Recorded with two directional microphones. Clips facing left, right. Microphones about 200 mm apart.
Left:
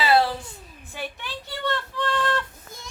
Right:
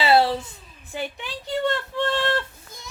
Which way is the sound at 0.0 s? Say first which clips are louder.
Right 2 dB; 25° right (ahead or behind).